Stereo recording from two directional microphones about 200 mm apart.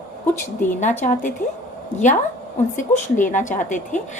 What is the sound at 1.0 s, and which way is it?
Speech, 40° left (ahead or behind).